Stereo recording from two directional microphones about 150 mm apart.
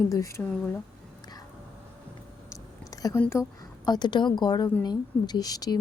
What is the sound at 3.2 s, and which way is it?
Speech, 15° left (ahead or behind).